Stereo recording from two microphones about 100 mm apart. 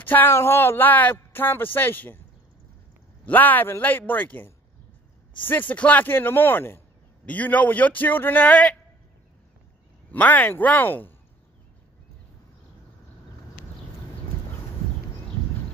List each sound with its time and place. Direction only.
0.0 s speech: 20° left (ahead or behind)
3.3 s a man's voice: 20° left (ahead or behind)
10.1 s a man's voice: 15° left (ahead or behind)